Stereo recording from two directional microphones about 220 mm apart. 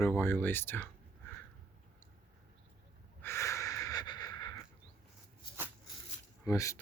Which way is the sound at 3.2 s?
10° left (ahead or behind).